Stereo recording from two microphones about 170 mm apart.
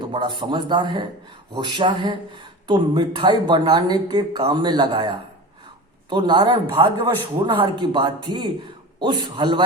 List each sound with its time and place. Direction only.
0.1 s speech: 30° right (ahead or behind)